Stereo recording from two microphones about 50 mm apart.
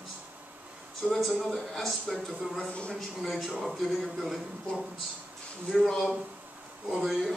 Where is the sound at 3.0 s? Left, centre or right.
Centre.